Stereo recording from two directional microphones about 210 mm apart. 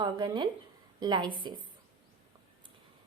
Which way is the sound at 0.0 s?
20° right (ahead or behind).